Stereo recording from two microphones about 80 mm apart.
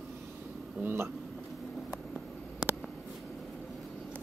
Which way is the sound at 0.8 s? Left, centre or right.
Right.